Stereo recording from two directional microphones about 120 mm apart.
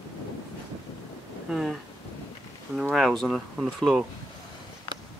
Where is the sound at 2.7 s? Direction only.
Centre (ahead or behind).